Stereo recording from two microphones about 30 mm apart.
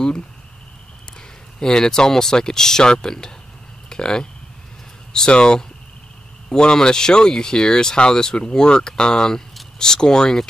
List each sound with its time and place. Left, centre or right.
1.6 s speech: left
6.6 s speech: left